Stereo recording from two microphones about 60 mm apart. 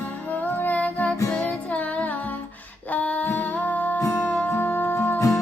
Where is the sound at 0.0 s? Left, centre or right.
Left.